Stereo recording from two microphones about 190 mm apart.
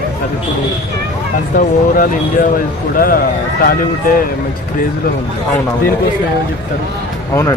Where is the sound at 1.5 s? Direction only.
45° left (ahead or behind).